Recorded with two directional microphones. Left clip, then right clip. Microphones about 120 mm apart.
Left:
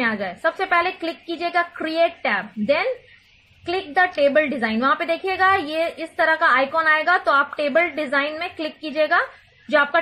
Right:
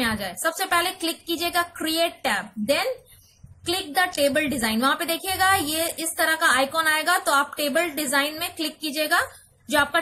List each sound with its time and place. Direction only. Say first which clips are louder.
0.0 s a woman's voice: left 3 dB; 40° left (ahead or behind)